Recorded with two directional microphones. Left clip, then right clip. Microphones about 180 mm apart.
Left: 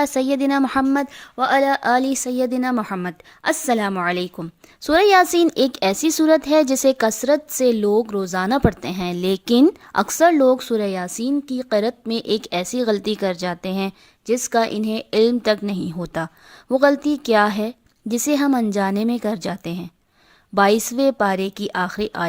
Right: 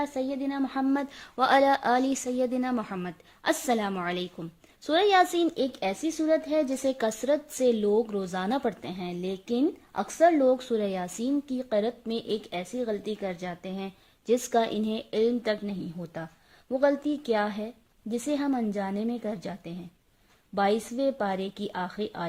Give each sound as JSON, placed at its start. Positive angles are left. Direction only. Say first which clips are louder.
{"t": 0.0, "sound": "a woman's voice", "louder": "left 11 dB", "side_deg": 40}
{"t": 0.9, "sound": "a woman's voice", "louder": "left 8 dB", "side_deg": 20}
{"t": 3.4, "sound": "a woman's voice", "louder": "left 7 dB", "side_deg": 25}
{"t": 14.3, "sound": "a woman's voice", "louder": "left 6 dB", "side_deg": 15}